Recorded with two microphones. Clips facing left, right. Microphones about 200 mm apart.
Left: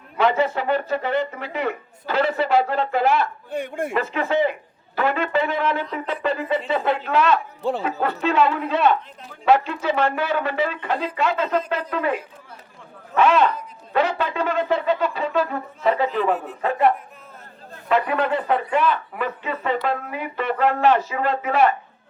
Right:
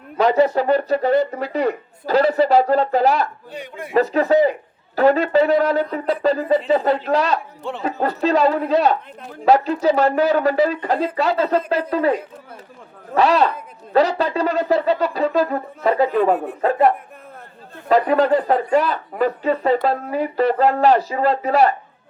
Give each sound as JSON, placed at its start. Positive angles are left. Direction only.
{"t": 0.2, "sound": "speech", "side_deg": -40}
{"t": 3.5, "sound": "a man's voice", "side_deg": 50}
{"t": 3.9, "sound": "speech", "side_deg": -40}
{"t": 13.1, "sound": "speech", "side_deg": -35}